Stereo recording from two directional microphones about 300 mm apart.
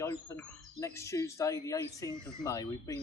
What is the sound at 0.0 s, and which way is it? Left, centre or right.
Speech, centre.